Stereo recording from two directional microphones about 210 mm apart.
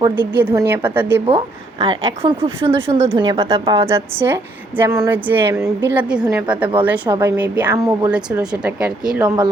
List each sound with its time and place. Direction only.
0.2 s a woman's voice: 10° right (ahead or behind)
1.3 s a woman's voice: 25° right (ahead or behind)
3.8 s a woman's voice: 10° right (ahead or behind)
9.2 s a woman's voice: 20° right (ahead or behind)